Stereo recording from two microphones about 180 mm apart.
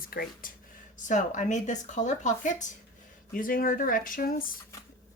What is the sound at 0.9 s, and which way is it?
Speech, 45° left (ahead or behind).